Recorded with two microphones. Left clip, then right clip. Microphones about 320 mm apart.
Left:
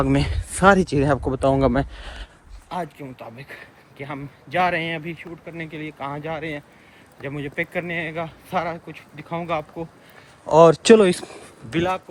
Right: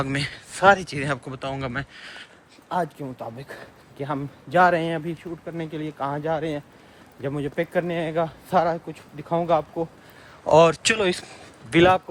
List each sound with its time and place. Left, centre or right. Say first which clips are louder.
0.0 s speech: left 5 dB; centre
2.6 s speech: right 3 dB; centre
10.4 s speech: left 3 dB; centre
11.8 s a man's voice: right 6 dB; right